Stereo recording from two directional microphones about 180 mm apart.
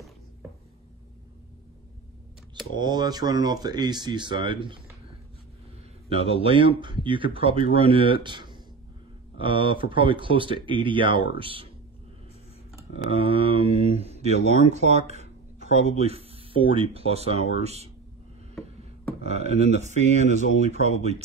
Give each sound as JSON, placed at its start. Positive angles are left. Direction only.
{"t": 2.8, "sound": "speech", "side_deg": -25}
{"t": 6.0, "sound": "speech", "side_deg": -35}
{"t": 13.1, "sound": "speech", "side_deg": -30}
{"t": 19.2, "sound": "speech", "side_deg": -35}